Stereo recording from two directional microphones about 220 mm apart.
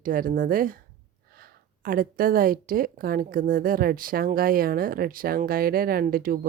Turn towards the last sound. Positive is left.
turn(degrees=-40)  # may be behind; listen again after turning